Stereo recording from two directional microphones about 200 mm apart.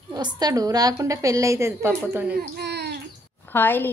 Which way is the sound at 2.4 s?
55° right (ahead or behind).